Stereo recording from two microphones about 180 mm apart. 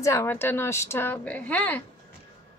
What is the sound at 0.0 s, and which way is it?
A woman's voice, 15° left (ahead or behind).